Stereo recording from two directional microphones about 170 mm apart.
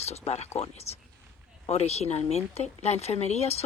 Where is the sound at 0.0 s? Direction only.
40° left (ahead or behind).